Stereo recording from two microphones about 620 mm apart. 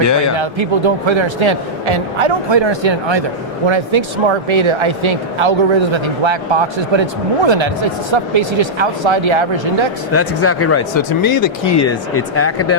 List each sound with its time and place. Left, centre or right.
0.3 s speech: right
10.1 s speech: left
11.2 s speech: left
12.1 s speech: left